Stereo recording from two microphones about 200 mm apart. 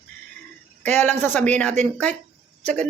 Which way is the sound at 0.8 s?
10° left (ahead or behind).